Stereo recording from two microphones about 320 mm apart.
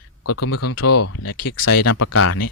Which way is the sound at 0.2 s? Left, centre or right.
Left.